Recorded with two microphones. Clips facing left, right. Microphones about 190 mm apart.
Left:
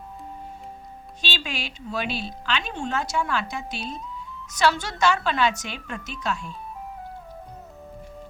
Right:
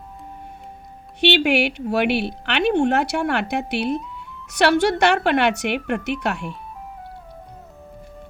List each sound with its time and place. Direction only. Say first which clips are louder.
1.2 s a woman's voice: right 15 dB; 70° right (ahead or behind)